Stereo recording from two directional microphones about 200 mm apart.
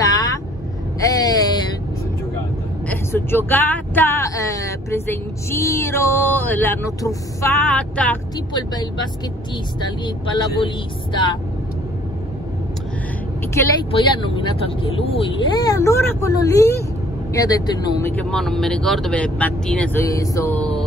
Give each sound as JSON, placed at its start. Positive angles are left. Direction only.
{"t": 0.0, "sound": "vehicle", "side_deg": 20}
{"t": 1.0, "sound": "a sound", "side_deg": 20}
{"t": 2.9, "sound": "speech", "side_deg": 10}
{"t": 8.5, "sound": "speech", "side_deg": 20}
{"t": 13.6, "sound": "speech", "side_deg": 10}
{"t": 14.1, "sound": "speech", "side_deg": 25}
{"t": 18.3, "sound": "speech", "side_deg": 0}